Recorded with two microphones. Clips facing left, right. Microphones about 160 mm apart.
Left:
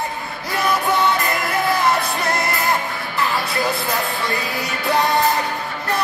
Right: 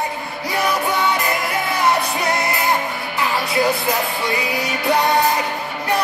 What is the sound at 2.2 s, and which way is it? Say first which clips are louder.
Music: right 1 dB; 15° right (ahead or behind).